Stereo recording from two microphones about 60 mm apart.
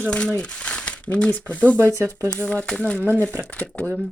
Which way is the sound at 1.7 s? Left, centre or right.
Right.